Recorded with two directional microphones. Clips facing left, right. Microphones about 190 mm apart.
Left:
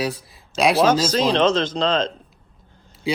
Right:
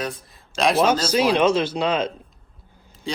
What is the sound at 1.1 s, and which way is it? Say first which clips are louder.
Speech: even; 10° right (ahead or behind).